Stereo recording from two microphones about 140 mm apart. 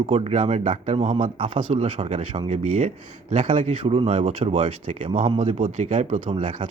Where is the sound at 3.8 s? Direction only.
45° right (ahead or behind); by 6.3 s 60° right (ahead or behind).